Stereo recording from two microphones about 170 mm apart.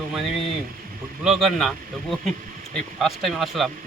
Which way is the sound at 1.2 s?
Centre (ahead or behind).